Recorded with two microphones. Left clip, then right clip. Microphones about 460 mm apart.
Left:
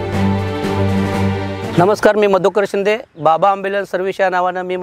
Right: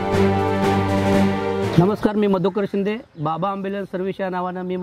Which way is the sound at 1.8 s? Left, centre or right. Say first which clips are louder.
Left 8 dB; left.